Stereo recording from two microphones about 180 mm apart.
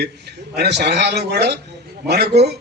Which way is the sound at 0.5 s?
70° right (ahead or behind).